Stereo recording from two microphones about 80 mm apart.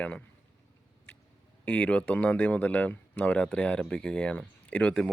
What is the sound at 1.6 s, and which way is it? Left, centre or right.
Speech, centre.